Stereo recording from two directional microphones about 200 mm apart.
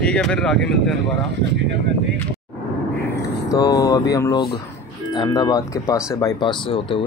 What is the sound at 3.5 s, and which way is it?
Speech, 15° left (ahead or behind).